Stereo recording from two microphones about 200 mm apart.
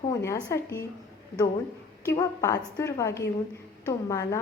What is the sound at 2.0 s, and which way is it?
A woman's voice, 15° left (ahead or behind).